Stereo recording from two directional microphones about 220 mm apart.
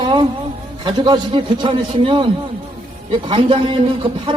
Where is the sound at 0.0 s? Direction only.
20° right (ahead or behind).